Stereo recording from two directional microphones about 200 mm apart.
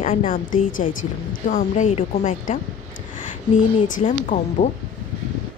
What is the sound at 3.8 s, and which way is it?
Speech, 40° left (ahead or behind).